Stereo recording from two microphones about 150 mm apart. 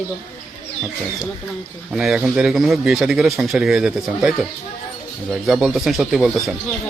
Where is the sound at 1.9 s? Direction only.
Centre (ahead or behind).